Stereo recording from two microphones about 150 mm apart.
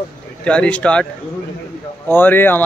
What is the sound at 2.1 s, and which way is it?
Speech, 15° left (ahead or behind).